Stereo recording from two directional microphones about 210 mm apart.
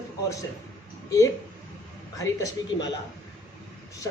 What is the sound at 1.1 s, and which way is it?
A woman's voice, 15° left (ahead or behind).